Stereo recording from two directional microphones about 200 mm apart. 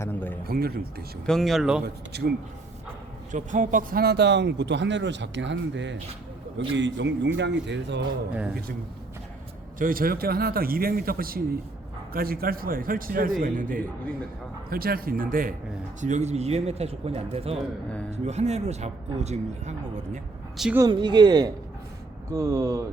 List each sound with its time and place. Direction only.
0.0 s a sound: 10° left (ahead or behind)
0.4 s speech: 50° right (ahead or behind)
1.3 s speech: centre (ahead or behind)
1.8 s speech: 55° right (ahead or behind)
3.3 s speech: 40° right (ahead or behind); by 8.0 s 60° right (ahead or behind)
9.7 s speech: 45° right (ahead or behind)
20.7 s speech: 20° right (ahead or behind)